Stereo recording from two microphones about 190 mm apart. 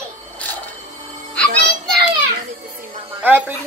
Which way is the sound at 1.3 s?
5° left (ahead or behind).